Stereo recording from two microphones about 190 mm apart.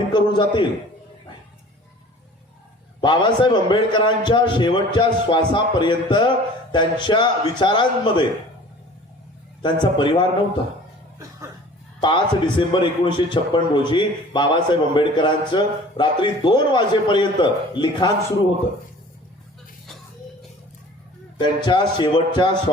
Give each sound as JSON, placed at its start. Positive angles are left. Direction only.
{"t": 0.1, "sound": "a sound", "side_deg": 25}
{"t": 3.0, "sound": "a man's voice", "side_deg": 25}
{"t": 9.6, "sound": "a man's voice", "side_deg": 25}
{"t": 12.0, "sound": "a man's voice", "side_deg": 25}
{"t": 21.3, "sound": "a man's voice", "side_deg": 25}